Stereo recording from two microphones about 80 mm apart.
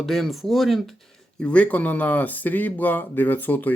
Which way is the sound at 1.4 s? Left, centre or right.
Centre.